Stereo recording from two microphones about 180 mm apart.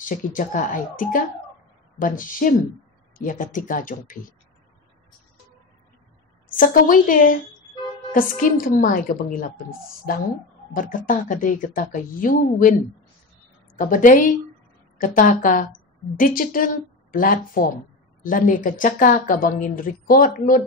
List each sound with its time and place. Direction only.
0.0 s speech: 45° left (ahead or behind)
6.5 s speech: 50° left (ahead or behind)
13.7 s speech: 50° left (ahead or behind)